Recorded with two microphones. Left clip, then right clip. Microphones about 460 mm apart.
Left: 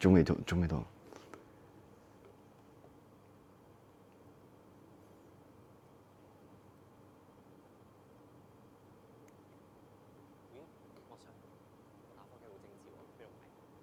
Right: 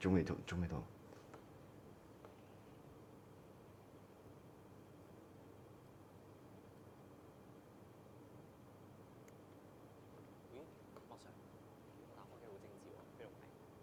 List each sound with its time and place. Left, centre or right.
0.0 s speech: left